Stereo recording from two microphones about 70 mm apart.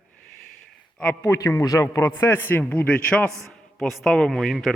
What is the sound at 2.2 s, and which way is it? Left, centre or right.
Speech, left.